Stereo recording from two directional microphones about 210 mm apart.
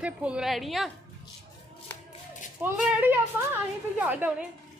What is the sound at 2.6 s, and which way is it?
A woman's voice, 5° right (ahead or behind).